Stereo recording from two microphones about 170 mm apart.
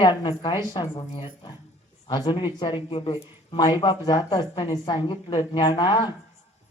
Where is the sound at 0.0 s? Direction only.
25° left (ahead or behind).